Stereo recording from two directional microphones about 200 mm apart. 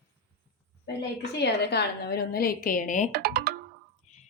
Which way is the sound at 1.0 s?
55° left (ahead or behind).